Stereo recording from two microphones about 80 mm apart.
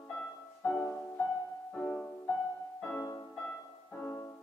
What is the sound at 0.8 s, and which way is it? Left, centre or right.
Music, left.